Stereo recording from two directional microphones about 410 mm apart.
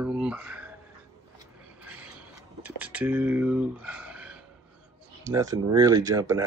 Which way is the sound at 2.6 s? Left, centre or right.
Centre.